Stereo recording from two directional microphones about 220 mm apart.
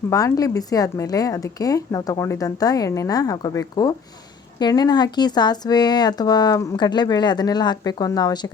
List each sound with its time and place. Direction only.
0.1 s speech: 15° left (ahead or behind)